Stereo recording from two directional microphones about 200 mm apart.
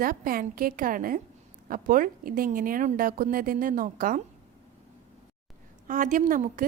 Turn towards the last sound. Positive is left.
turn(degrees=-40)  # may be behind; listen again after turning